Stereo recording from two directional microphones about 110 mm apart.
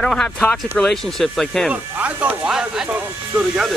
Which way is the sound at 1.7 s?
10° right (ahead or behind).